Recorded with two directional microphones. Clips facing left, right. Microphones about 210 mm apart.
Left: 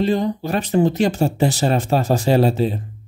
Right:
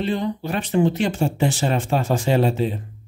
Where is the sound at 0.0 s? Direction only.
40° left (ahead or behind).